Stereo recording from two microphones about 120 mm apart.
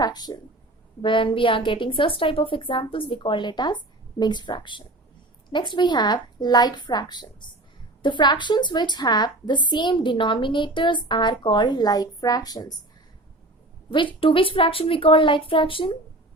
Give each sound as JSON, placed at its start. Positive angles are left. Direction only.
{"t": 0.0, "sound": "a woman's voice", "side_deg": 35}
{"t": 13.9, "sound": "a woman's voice", "side_deg": 45}